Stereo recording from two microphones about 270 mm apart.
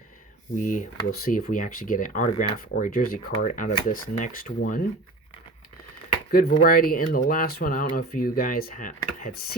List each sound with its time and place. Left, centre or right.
0.5 s speech: left
6.3 s speech: left